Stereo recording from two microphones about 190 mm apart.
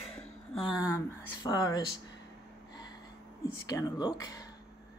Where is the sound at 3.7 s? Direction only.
20° left (ahead or behind).